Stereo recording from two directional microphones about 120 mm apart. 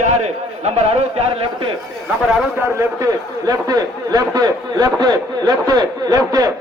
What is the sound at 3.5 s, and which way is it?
A man's voice, 30° right (ahead or behind).